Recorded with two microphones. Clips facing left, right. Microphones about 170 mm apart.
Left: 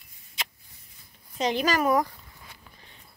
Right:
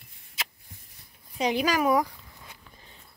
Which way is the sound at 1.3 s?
10° right (ahead or behind).